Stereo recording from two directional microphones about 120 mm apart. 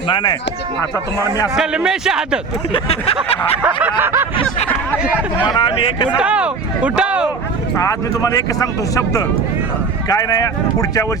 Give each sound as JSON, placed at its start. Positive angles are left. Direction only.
{"t": 0.1, "sound": "speech", "side_deg": 40}
{"t": 1.5, "sound": "a man's voice", "side_deg": -5}
{"t": 2.7, "sound": "speech", "side_deg": 55}
{"t": 3.6, "sound": "speech", "side_deg": -15}
{"t": 5.5, "sound": "speech", "side_deg": 45}
{"t": 6.1, "sound": "speech", "side_deg": -10}
{"t": 7.8, "sound": "speech", "side_deg": 30}
{"t": 10.1, "sound": "speech", "side_deg": 30}